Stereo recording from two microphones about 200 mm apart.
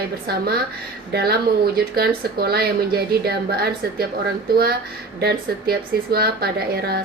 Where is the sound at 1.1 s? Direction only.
50° right (ahead or behind).